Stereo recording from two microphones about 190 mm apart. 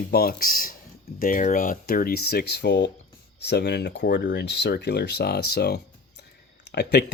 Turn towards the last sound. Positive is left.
turn(degrees=60)  # may be behind; listen again after turning